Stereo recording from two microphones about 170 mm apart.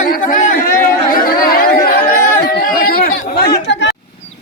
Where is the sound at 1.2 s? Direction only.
60° left (ahead or behind); by 3.9 s 90° left.